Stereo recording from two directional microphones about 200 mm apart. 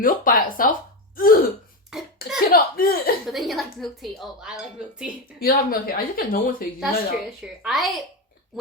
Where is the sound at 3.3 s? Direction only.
Centre (ahead or behind).